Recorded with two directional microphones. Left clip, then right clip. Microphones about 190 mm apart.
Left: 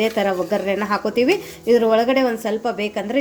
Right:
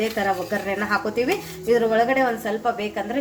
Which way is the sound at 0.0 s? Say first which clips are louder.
Left 4 dB; 35° left (ahead or behind).